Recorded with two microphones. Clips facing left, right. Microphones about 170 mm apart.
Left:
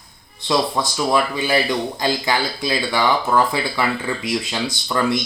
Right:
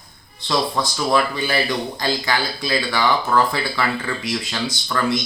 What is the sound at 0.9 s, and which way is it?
Speech, 10° left (ahead or behind).